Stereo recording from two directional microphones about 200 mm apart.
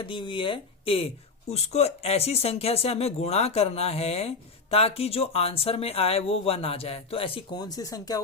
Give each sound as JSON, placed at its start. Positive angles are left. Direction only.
{"t": 0.0, "sound": "speech", "side_deg": 25}